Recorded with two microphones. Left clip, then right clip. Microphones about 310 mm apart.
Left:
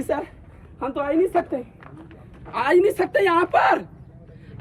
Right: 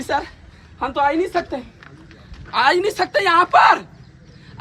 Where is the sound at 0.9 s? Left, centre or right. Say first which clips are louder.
Right 7 dB; right.